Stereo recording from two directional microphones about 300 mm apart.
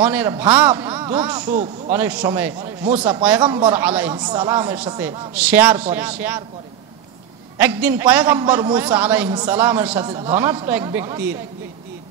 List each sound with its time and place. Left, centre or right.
0.0 s a man's voice: centre
7.5 s a man's voice: centre